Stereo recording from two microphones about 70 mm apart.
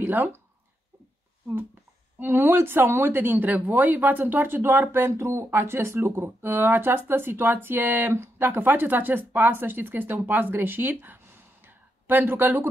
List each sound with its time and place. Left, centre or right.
0.0 s speech: right
2.1 s speech: right